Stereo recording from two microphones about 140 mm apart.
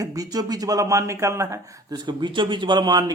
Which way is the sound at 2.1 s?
35° right (ahead or behind).